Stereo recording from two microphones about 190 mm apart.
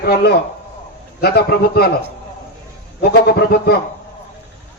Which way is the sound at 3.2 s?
55° left (ahead or behind).